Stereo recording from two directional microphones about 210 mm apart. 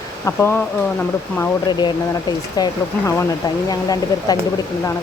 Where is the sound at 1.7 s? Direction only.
20° left (ahead or behind).